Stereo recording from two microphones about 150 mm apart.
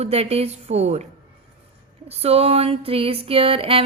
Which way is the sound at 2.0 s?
40° right (ahead or behind).